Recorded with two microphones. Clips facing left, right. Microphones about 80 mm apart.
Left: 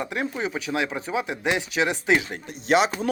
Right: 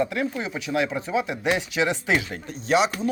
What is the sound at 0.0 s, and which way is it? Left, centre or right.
Speech, left.